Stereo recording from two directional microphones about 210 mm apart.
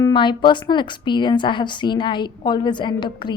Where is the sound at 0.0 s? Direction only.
20° left (ahead or behind).